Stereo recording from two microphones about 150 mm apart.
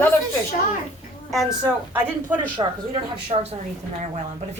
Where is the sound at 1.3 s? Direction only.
Centre (ahead or behind).